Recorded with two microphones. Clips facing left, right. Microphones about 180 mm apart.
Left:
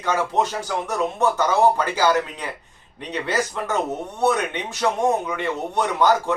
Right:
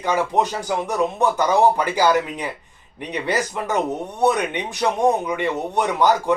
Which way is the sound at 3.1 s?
15° right (ahead or behind).